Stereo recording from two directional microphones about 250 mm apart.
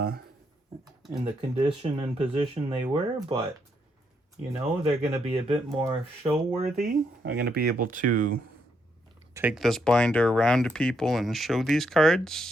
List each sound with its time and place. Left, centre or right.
1.2 s speech: right
4.8 s speech: right
7.2 s speech: right
9.3 s speech: centre